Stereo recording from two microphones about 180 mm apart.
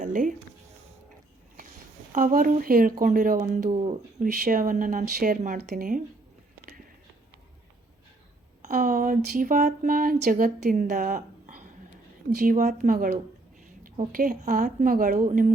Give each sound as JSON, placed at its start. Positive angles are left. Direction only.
{"t": 0.0, "sound": "a sound", "side_deg": -45}
{"t": 2.1, "sound": "speech", "side_deg": -45}
{"t": 8.6, "sound": "speech", "side_deg": -50}